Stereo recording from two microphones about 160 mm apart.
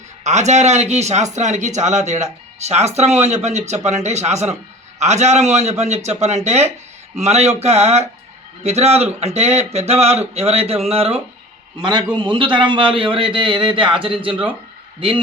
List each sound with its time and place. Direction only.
0.3 s a man's voice: 45° right (ahead or behind)